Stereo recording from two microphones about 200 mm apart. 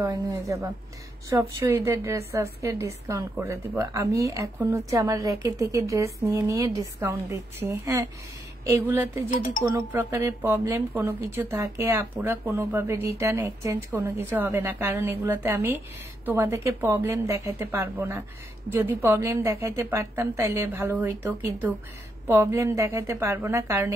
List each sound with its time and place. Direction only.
0.0 s a woman's voice: 15° right (ahead or behind)